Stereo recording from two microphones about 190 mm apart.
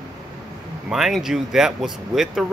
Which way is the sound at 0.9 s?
Centre (ahead or behind).